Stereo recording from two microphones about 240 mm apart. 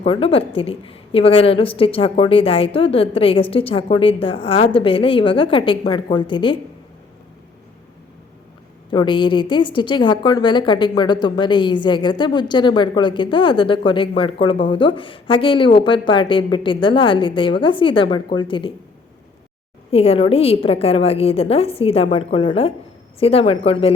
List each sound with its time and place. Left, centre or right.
0.0 s a woman's voice: left
8.9 s a woman's voice: centre
19.9 s a woman's voice: left